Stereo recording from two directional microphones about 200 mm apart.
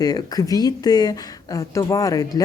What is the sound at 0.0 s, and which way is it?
Speech, 20° left (ahead or behind).